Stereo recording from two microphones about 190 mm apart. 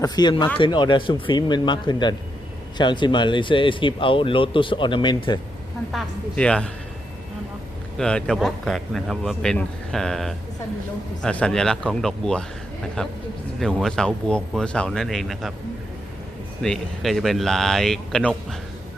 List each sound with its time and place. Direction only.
0.0 s speech: 25° left (ahead or behind)
5.9 s speech: 5° left (ahead or behind)
7.9 s speech: 5° left (ahead or behind)
16.6 s speech: centre (ahead or behind)